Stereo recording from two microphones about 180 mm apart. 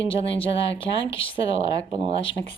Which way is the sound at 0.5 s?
90° left.